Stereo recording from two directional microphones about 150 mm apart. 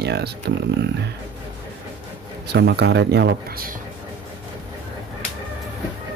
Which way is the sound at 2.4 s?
90° right.